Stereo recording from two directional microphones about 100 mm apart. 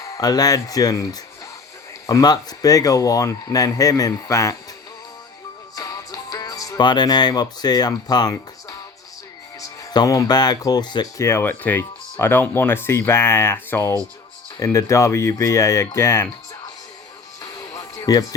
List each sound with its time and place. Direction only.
0.0 s speech: 40° left (ahead or behind)
5.7 s speech: 35° left (ahead or behind)
9.6 s speech: 40° left (ahead or behind)
11.2 s speech: 25° left (ahead or behind)
17.4 s music: 35° left (ahead or behind)